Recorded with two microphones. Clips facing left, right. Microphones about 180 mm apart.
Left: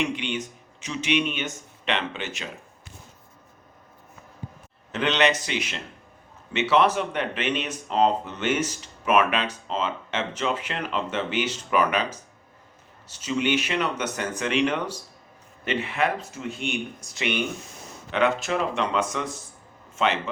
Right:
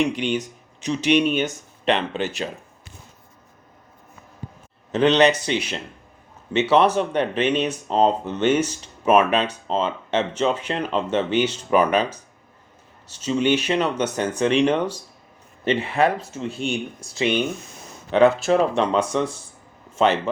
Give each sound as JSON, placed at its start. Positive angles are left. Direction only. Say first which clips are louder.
{"t": 0.0, "sound": "speech", "louder": "right 6 dB", "side_deg": -40}
{"t": 4.9, "sound": "speech", "louder": "right 6 dB", "side_deg": -35}
{"t": 13.1, "sound": "speech", "louder": "right 5 dB", "side_deg": -30}